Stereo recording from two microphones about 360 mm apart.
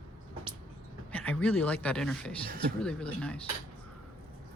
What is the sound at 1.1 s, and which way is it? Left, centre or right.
Speech, centre.